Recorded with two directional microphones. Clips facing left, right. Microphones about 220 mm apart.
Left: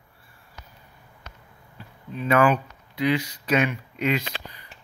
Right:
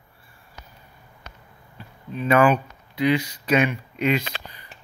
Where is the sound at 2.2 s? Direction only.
20° right (ahead or behind).